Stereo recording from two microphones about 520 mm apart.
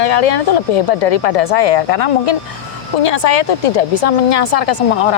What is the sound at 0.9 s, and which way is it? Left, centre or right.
Speech, left.